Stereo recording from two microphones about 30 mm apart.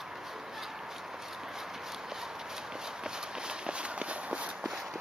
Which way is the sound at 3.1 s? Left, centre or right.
Right.